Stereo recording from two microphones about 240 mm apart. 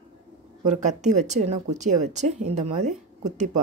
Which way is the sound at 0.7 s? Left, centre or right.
Right.